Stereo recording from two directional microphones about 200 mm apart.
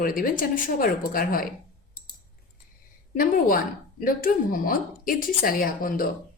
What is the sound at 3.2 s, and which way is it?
A woman's voice, 45° left (ahead or behind).